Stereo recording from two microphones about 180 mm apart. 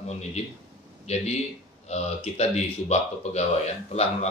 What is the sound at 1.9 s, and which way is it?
Speech, 35° left (ahead or behind).